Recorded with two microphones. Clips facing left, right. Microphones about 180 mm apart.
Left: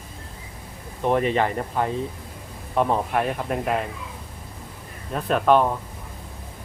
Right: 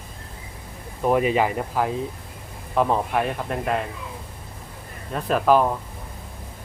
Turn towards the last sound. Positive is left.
turn(degrees=-5)  # may be behind; listen again after turning